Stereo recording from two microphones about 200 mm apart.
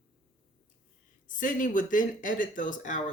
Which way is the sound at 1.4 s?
40° left (ahead or behind).